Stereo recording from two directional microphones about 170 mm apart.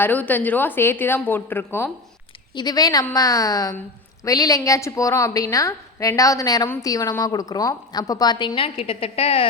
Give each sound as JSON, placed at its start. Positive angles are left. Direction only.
{"t": 0.0, "sound": "a woman's voice", "side_deg": 10}